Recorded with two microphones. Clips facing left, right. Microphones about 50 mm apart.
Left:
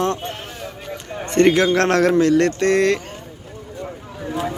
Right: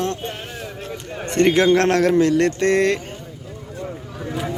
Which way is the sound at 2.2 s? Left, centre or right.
Centre.